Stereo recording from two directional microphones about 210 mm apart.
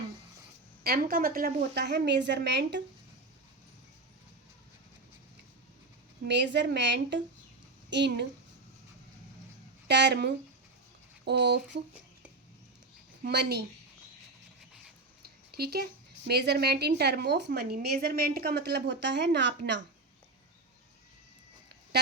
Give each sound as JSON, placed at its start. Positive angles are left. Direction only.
{"t": 0.9, "sound": "a woman's voice", "side_deg": -45}
{"t": 6.2, "sound": "a woman's voice", "side_deg": -55}
{"t": 9.8, "sound": "a woman's voice", "side_deg": -55}
{"t": 13.2, "sound": "a woman's voice", "side_deg": -50}
{"t": 15.2, "sound": "a woman's voice", "side_deg": -50}